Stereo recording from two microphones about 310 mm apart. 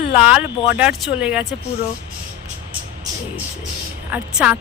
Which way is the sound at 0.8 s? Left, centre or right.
Centre.